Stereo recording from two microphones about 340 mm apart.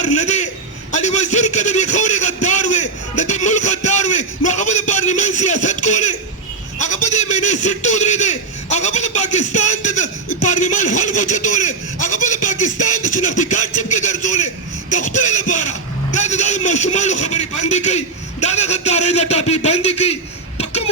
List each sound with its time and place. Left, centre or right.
0.0 s a man's voice: left
0.9 s a sound: centre
6.7 s a man's voice: left